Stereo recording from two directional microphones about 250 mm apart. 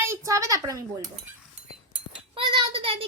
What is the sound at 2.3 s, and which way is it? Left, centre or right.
Child singing, centre.